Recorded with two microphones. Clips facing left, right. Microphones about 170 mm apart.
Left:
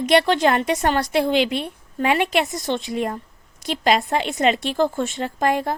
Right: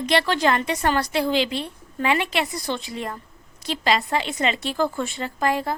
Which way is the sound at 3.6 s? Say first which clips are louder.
Left 3 dB; 50° left (ahead or behind).